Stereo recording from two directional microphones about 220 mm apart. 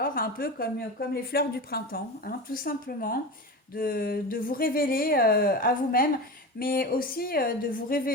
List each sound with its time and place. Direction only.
0.0 s a woman's voice: 40° left (ahead or behind)